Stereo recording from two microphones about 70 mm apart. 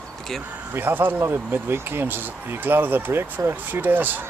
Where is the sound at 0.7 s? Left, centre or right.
Right.